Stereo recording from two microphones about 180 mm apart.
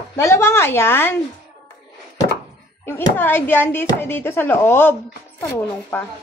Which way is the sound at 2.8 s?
15° left (ahead or behind).